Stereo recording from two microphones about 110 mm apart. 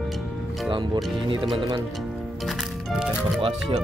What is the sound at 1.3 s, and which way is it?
Speech, 50° right (ahead or behind).